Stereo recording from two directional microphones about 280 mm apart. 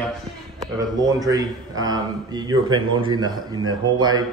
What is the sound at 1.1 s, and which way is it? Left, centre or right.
A man's voice, centre.